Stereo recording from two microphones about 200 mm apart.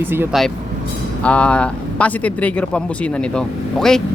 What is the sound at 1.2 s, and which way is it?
Speech, 5° left (ahead or behind).